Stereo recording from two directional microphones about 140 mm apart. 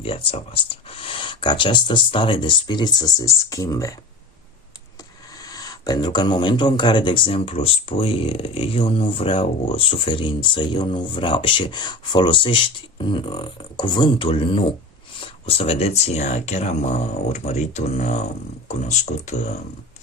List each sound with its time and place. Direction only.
0.0 s speech: 45° left (ahead or behind); by 3.9 s 25° left (ahead or behind)
5.4 s speech: 25° left (ahead or behind); by 19.4 s 55° left (ahead or behind)